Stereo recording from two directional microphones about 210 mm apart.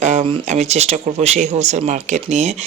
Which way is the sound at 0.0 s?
30° right (ahead or behind).